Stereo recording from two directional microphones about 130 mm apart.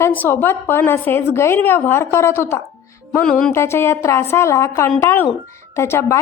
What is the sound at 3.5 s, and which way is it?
A woman's voice, 20° left (ahead or behind).